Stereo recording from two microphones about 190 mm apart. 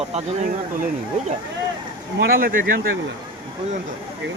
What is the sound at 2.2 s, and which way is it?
Speech, 50° right (ahead or behind).